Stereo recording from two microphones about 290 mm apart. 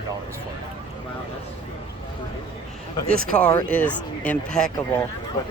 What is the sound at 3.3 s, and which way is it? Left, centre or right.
Speech, centre.